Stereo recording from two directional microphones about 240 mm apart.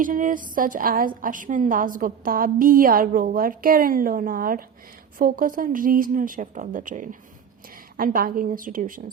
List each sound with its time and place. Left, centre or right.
0.0 s a woman's voice: right